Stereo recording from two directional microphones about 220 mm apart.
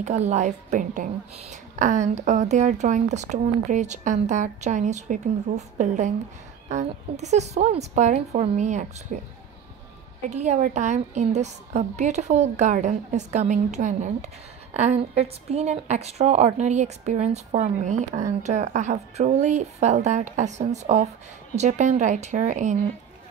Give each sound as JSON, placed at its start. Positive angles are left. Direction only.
{"t": 0.0, "sound": "a woman's voice", "side_deg": -30}
{"t": 10.3, "sound": "a woman's voice", "side_deg": -30}